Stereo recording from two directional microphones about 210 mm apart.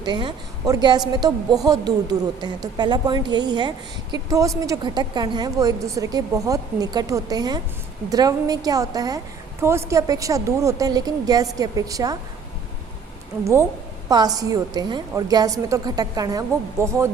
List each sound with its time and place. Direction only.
0.0 s a woman's voice: 20° right (ahead or behind)
13.4 s a woman's voice: 15° right (ahead or behind)